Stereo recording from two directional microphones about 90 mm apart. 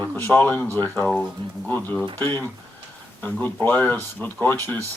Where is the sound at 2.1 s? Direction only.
25° left (ahead or behind).